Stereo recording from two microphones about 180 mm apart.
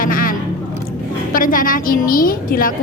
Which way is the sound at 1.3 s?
50° left (ahead or behind).